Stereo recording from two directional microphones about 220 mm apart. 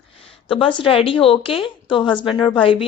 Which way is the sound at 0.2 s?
25° left (ahead or behind).